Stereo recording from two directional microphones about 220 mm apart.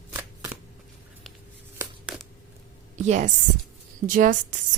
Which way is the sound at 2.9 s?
35° right (ahead or behind).